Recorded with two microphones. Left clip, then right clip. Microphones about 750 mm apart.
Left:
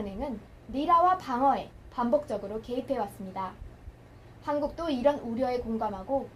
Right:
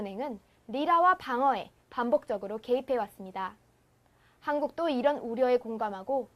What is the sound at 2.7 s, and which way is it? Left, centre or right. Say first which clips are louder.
Speech: right 7 dB; right.